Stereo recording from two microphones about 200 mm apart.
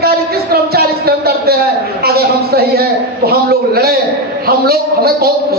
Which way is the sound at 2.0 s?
50° right (ahead or behind).